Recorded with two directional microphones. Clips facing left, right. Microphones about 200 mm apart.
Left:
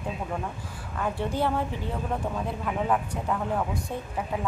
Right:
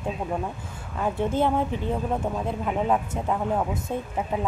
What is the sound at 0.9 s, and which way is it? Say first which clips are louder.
Speech: right 4 dB; 20° right (ahead or behind).